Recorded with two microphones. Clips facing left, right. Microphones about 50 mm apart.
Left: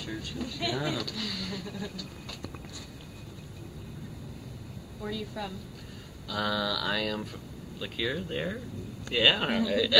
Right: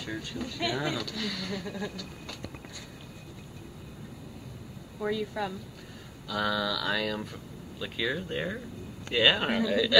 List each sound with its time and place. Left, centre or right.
0.0 s speech: centre
5.0 s speech: right
6.2 s speech: centre